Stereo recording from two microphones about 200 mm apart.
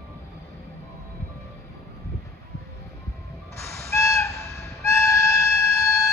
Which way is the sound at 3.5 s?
15° left (ahead or behind).